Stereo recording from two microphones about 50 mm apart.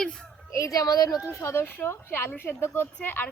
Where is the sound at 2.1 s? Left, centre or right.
Left.